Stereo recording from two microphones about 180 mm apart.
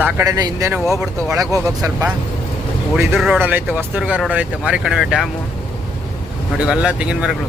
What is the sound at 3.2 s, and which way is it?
Speech, 5° right (ahead or behind).